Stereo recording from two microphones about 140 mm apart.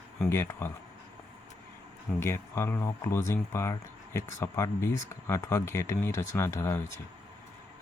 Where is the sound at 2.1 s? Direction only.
20° left (ahead or behind).